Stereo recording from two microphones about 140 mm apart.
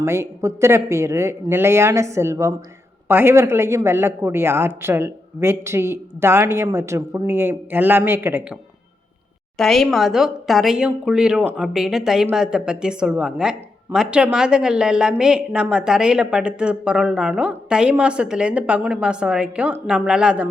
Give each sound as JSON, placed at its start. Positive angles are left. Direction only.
{"t": 0.0, "sound": "a woman's voice", "side_deg": -20}
{"t": 9.6, "sound": "speech", "side_deg": 5}